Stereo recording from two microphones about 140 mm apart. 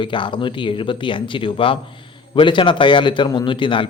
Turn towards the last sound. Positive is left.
turn(degrees=35)  # may be behind; listen again after turning